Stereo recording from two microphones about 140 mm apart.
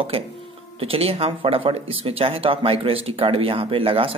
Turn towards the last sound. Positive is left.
turn(degrees=-40)  # may be behind; listen again after turning